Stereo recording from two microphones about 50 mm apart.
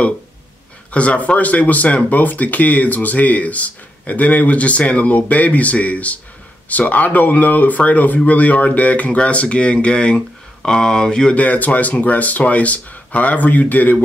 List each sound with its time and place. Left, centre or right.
0.9 s speech: left
11.3 s speech: left